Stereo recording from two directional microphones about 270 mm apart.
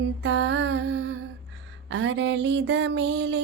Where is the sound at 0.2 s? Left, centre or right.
Right.